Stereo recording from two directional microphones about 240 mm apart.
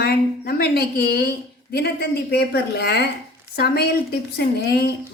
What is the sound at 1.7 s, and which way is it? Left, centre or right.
A woman's voice, left.